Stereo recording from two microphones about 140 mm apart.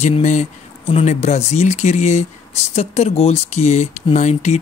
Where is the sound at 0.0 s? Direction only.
55° left (ahead or behind).